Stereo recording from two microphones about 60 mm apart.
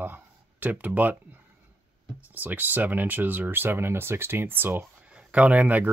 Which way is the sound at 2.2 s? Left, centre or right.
Right.